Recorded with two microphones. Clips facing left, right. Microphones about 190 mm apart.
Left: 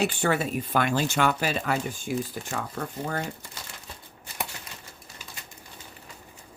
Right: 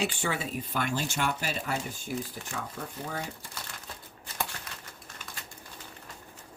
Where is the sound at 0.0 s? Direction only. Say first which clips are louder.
Left 6 dB; 60° left (ahead or behind).